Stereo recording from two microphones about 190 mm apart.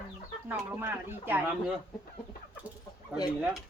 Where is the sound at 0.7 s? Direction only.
10° right (ahead or behind).